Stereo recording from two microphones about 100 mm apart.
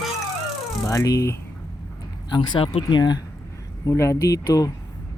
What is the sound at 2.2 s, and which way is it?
Speech, 50° left (ahead or behind).